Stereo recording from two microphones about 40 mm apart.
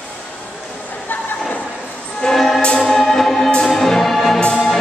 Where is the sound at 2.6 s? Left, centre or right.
Centre.